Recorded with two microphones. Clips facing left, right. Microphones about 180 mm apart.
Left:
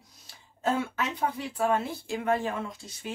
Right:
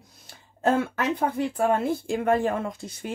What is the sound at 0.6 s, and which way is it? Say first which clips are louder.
Speech: right 5 dB; 55° right (ahead or behind).